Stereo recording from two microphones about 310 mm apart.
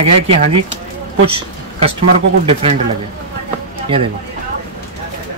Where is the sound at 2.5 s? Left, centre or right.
Centre.